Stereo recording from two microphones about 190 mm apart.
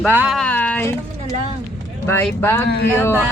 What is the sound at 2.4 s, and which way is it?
Speech, 15° left (ahead or behind).